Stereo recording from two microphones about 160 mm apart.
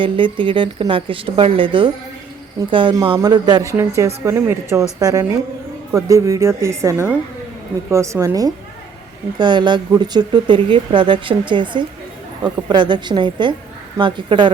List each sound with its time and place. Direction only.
0.0 s a woman's voice: 30° right (ahead or behind)